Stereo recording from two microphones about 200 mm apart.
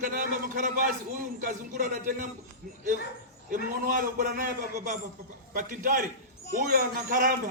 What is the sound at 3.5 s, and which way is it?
Speech, 45° right (ahead or behind).